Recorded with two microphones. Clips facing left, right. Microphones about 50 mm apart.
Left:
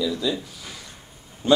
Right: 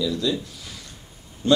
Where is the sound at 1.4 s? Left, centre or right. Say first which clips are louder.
Left 1 dB; centre.